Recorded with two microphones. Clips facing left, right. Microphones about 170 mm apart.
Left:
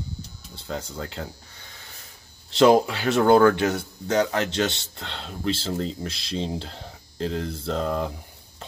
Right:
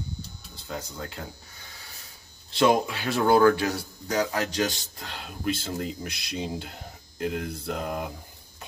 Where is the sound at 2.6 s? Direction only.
30° left (ahead or behind).